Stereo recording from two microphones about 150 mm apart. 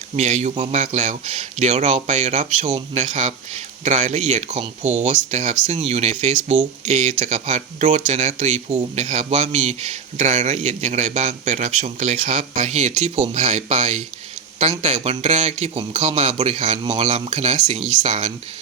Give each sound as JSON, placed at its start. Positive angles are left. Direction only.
{"t": 0.2, "sound": "a man's voice", "side_deg": -50}